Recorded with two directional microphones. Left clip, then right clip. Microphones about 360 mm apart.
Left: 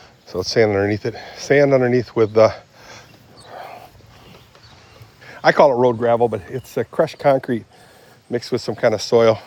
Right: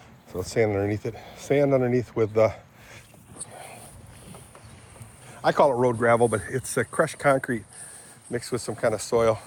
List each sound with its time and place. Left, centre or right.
0.3 s speech: left
3.5 s dog: left
5.3 s speech: left